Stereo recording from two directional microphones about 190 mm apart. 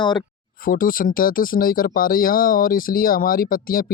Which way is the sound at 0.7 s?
50° left (ahead or behind).